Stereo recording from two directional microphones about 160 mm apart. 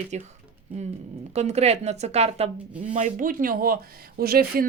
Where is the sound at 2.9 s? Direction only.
55° right (ahead or behind); by 4.7 s 70° right (ahead or behind).